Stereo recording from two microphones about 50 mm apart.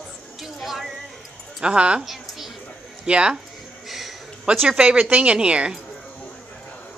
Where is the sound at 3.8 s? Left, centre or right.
Centre.